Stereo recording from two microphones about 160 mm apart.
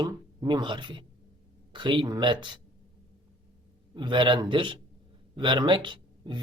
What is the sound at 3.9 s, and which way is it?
Speech, 30° right (ahead or behind).